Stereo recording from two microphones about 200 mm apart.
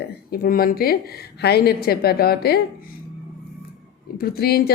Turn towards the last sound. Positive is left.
turn(degrees=50)  # may be behind; listen again after turning